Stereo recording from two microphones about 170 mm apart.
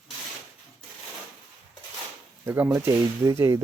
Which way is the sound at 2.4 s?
15° right (ahead or behind).